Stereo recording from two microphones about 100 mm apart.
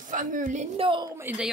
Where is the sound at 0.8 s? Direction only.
60° right (ahead or behind).